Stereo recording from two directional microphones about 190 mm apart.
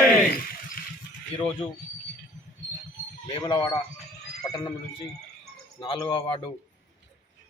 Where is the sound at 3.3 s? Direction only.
20° left (ahead or behind).